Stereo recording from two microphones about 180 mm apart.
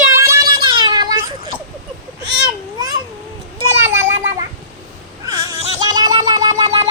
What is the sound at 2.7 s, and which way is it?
Cat, 20° right (ahead or behind).